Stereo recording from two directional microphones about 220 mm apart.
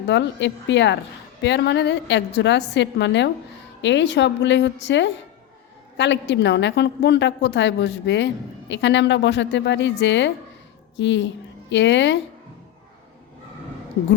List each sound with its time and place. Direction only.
0.1 s a woman's voice: 55° left (ahead or behind)